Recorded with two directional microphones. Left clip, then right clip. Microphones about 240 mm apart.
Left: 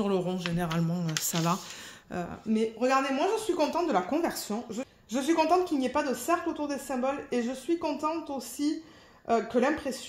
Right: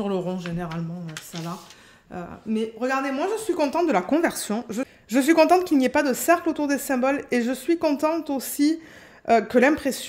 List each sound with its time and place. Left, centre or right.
0.0 s speech: centre
0.7 s speech: left
2.5 s a woman's voice: centre; by 10.0 s right